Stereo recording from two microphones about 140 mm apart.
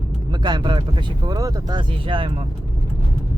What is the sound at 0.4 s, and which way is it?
Speech, 30° right (ahead or behind).